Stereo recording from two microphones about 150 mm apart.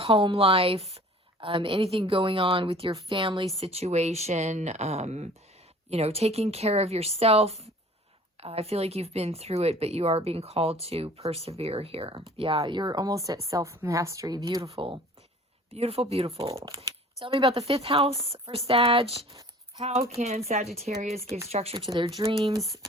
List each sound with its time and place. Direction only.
0.0 s speech: 40° right (ahead or behind); by 14.6 s 25° right (ahead or behind)
14.6 s speech: 35° right (ahead or behind)
20.1 s speech: 45° right (ahead or behind)
22.5 s speech: 25° right (ahead or behind)